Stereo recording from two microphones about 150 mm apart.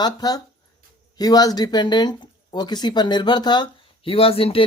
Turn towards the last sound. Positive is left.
turn(degrees=40)  # may be behind; listen again after turning